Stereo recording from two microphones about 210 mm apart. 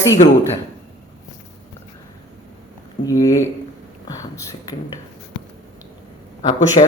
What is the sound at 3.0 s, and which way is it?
Speech, 15° left (ahead or behind).